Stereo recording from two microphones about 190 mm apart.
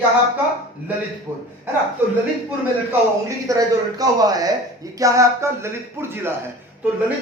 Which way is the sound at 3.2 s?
20° right (ahead or behind).